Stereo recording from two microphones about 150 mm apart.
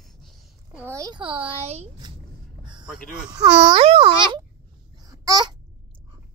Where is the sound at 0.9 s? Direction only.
25° right (ahead or behind); by 1.9 s 45° right (ahead or behind).